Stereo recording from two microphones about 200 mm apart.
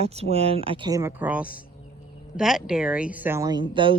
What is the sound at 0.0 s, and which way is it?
A woman's voice, 30° right (ahead or behind).